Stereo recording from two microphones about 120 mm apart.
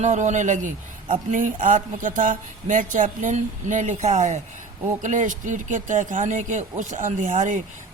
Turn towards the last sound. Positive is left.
turn(degrees=-90)